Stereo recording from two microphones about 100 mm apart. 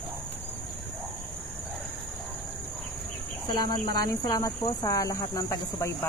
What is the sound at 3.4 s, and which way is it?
Speech, 40° left (ahead or behind).